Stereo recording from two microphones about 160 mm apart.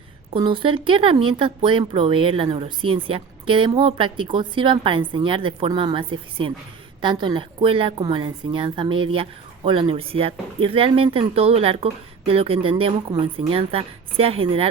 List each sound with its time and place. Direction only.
0.3 s speech: 30° right (ahead or behind)